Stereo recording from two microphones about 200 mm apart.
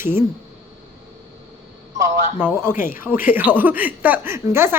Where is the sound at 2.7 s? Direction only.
45° left (ahead or behind).